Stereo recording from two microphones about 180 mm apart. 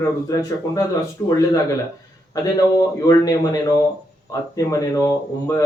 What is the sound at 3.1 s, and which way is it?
Speech, 20° left (ahead or behind).